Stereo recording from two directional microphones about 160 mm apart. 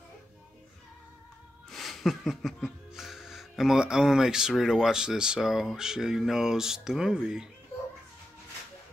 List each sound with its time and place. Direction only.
1.7 s music: centre (ahead or behind)